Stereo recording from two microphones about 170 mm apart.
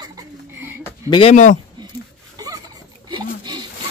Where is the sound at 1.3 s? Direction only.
45° left (ahead or behind).